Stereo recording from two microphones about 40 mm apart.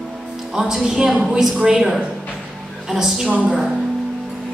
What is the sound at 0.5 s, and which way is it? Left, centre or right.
A woman's voice, centre.